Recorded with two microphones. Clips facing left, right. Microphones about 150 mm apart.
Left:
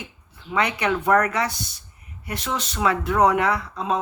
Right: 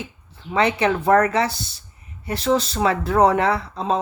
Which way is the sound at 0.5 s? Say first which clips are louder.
Right 4 dB; 30° right (ahead or behind).